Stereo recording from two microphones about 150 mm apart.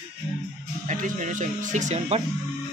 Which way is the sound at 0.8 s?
55° right (ahead or behind).